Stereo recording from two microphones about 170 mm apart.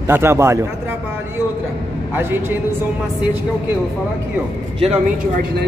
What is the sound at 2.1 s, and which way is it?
Speech, 10° right (ahead or behind).